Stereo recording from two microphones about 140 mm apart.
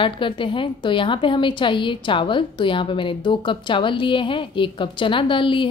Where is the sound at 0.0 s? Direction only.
35° left (ahead or behind).